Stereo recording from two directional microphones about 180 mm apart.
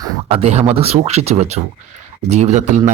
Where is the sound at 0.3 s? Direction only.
35° right (ahead or behind).